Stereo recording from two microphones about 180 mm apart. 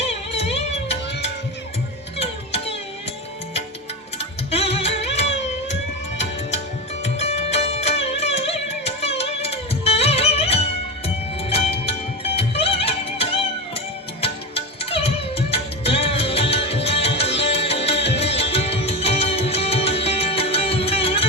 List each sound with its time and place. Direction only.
0.0 s music: 35° left (ahead or behind)
4.5 s music: 35° left (ahead or behind)
7.0 s music: 35° left (ahead or behind)